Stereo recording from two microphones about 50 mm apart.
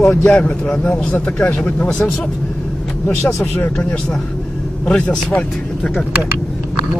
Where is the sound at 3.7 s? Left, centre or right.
Centre.